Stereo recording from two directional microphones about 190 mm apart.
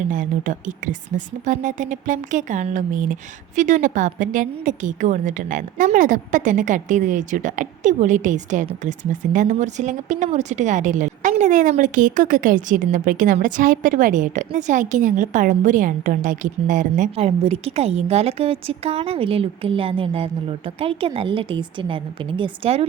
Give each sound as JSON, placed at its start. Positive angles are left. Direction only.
{"t": 0.1, "sound": "speech", "side_deg": -45}